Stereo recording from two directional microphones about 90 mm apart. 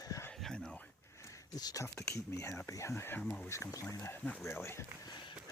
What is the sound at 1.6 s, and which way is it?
Speech, 45° left (ahead or behind).